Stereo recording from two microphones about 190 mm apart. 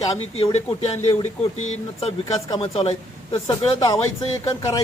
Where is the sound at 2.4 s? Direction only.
20° left (ahead or behind).